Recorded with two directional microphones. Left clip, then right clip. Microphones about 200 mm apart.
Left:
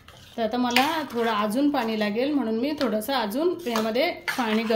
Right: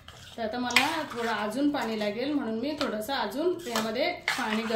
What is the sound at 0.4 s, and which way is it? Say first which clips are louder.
Speech: left 3 dB; 40° left (ahead or behind).